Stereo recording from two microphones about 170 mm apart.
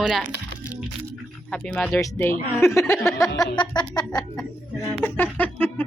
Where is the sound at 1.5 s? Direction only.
5° left (ahead or behind).